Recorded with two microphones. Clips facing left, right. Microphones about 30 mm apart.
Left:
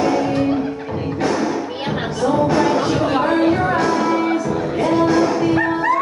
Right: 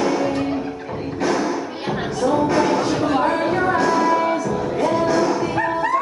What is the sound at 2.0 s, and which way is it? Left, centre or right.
Music, centre.